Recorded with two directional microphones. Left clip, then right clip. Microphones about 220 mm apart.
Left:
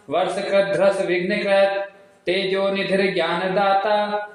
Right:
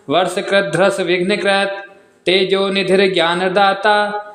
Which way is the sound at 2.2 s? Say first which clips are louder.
Right 6 dB; 40° right (ahead or behind).